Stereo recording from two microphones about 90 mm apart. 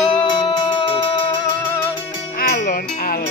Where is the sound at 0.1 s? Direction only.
60° left (ahead or behind).